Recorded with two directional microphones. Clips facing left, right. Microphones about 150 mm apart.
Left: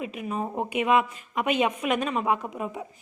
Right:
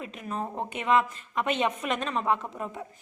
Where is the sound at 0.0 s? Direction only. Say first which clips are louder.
Left 3 dB; 10° left (ahead or behind).